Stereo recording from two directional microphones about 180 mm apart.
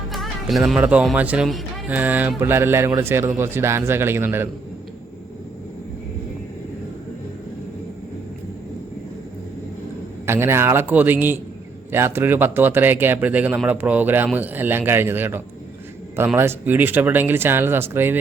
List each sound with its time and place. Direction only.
0.1 s speech: centre (ahead or behind)
10.2 s speech: 15° right (ahead or behind)